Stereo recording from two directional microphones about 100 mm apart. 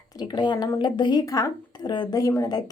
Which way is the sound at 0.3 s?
50° left (ahead or behind).